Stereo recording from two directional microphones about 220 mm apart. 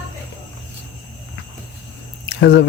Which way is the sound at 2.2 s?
50° left (ahead or behind).